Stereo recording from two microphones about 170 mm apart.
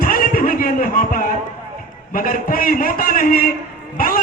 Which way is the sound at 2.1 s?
55° left (ahead or behind).